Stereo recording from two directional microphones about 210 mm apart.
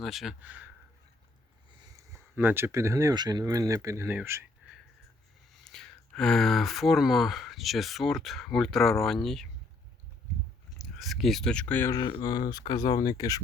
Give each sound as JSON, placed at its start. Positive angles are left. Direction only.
{"t": 0.0, "sound": "speech", "side_deg": 0}
{"t": 2.1, "sound": "speech", "side_deg": -10}
{"t": 5.5, "sound": "speech", "side_deg": 0}
{"t": 10.8, "sound": "speech", "side_deg": 0}